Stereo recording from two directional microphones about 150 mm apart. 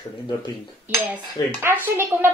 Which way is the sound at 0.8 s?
15° right (ahead or behind).